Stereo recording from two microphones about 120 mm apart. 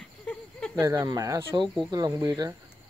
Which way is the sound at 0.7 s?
25° right (ahead or behind).